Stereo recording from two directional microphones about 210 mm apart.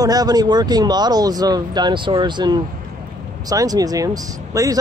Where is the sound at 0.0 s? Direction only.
15° right (ahead or behind).